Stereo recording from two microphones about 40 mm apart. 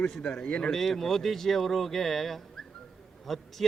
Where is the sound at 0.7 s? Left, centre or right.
Centre.